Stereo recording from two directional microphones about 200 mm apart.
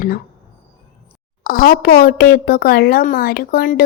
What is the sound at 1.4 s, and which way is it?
A woman's voice, 50° left (ahead or behind).